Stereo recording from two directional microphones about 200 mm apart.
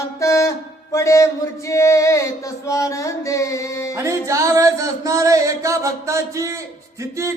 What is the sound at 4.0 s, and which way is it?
Music, 15° right (ahead or behind).